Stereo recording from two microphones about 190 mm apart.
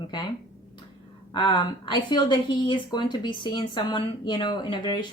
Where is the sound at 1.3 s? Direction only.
25° left (ahead or behind).